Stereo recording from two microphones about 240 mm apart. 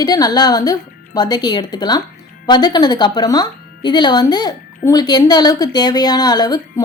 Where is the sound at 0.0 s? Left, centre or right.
Centre.